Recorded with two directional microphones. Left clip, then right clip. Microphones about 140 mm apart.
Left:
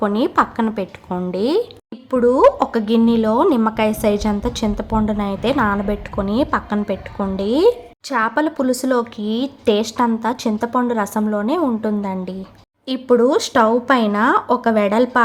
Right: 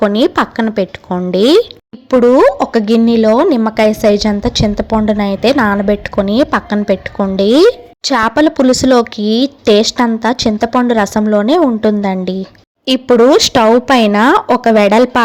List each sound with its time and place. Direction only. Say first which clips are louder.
0.0 s a woman's voice: right 5 dB; 35° right (ahead or behind)